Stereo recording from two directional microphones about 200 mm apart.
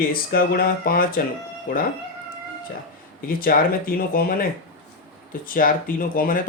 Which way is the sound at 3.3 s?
45° left (ahead or behind).